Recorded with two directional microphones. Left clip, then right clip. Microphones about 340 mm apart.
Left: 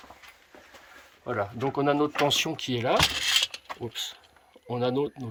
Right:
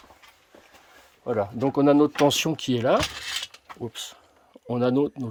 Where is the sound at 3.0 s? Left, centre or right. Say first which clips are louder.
Left 6 dB; left.